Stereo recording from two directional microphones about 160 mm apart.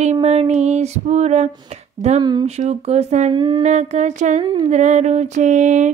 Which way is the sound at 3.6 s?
45° right (ahead or behind).